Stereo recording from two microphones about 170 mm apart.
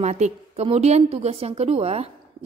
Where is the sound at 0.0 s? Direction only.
40° right (ahead or behind).